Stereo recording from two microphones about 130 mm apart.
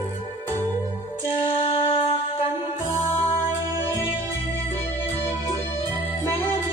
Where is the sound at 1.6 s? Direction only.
45° left (ahead or behind).